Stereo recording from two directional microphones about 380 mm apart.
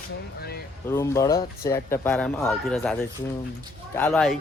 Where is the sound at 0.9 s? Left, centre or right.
Centre.